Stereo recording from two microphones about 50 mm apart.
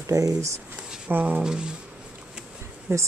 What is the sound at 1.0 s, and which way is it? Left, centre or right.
Speech, right.